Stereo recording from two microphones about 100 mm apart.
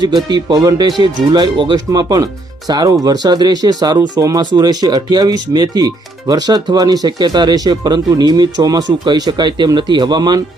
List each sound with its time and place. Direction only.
0.0 s speech: 45° right (ahead or behind)
1.9 s speech: 40° right (ahead or behind)